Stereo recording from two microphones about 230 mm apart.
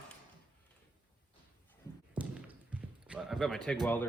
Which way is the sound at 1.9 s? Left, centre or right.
Centre.